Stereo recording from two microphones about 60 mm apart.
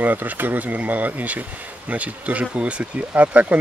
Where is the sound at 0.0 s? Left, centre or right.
Right.